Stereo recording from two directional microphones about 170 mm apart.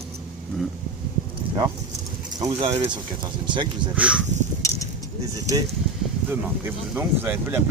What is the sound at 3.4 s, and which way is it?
Speech, 25° right (ahead or behind).